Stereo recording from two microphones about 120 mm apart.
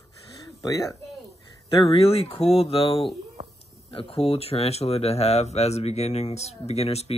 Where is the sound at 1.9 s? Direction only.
55° left (ahead or behind).